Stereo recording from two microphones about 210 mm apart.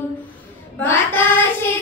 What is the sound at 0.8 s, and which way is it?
Female singing, 10° left (ahead or behind).